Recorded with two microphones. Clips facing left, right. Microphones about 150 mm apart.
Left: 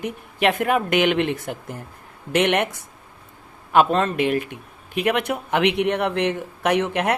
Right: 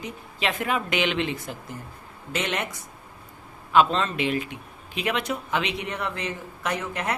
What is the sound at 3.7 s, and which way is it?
A woman's voice, 55° left (ahead or behind).